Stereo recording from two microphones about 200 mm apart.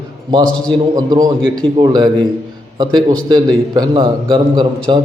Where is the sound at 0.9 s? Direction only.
20° right (ahead or behind).